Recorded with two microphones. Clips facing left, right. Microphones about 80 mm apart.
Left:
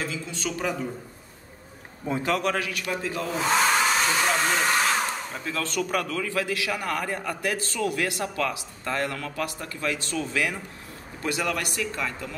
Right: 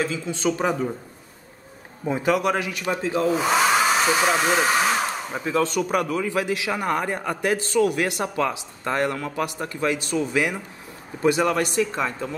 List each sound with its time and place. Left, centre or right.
0.0 s a man's voice: right
2.0 s a man's voice: centre
3.3 s hair dryer: centre
5.3 s a man's voice: right